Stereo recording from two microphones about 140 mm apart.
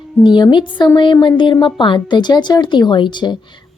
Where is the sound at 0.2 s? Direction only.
35° left (ahead or behind).